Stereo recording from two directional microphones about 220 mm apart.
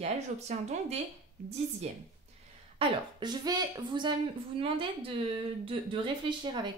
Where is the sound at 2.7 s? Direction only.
20° right (ahead or behind).